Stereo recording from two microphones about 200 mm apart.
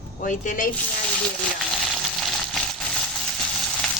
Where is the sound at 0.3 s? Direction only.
45° left (ahead or behind).